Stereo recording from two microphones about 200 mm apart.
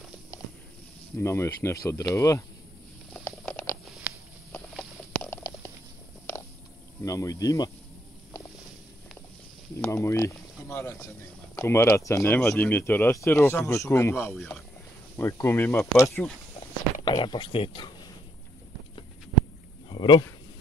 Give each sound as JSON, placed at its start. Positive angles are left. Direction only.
{"t": 1.1, "sound": "speech", "side_deg": 15}
{"t": 3.1, "sound": "patter", "side_deg": 10}
{"t": 3.8, "sound": "a sound", "side_deg": 0}
{"t": 7.1, "sound": "speech", "side_deg": 15}
{"t": 9.8, "sound": "speech", "side_deg": 15}
{"t": 14.3, "sound": "speech", "side_deg": 0}
{"t": 15.1, "sound": "speech", "side_deg": 15}
{"t": 17.0, "sound": "speech", "side_deg": 25}
{"t": 19.9, "sound": "a sound", "side_deg": 25}